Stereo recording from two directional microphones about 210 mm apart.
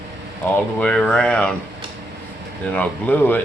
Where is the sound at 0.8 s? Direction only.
5° left (ahead or behind).